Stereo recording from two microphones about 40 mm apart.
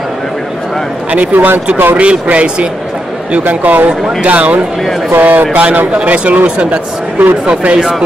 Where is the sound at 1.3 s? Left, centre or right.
Right.